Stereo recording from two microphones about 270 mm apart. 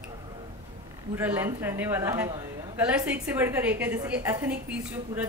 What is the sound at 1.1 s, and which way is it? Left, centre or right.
A woman's voice, centre.